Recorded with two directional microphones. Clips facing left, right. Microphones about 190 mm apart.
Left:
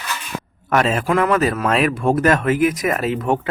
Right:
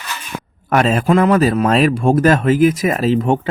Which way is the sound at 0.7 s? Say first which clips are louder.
Right 3 dB; 35° right (ahead or behind).